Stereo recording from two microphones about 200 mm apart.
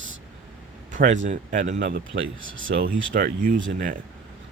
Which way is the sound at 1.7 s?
65° right (ahead or behind).